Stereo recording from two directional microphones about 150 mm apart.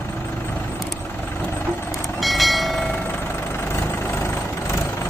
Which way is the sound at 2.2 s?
Centre (ahead or behind).